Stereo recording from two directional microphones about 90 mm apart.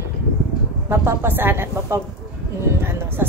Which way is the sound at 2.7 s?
25° right (ahead or behind).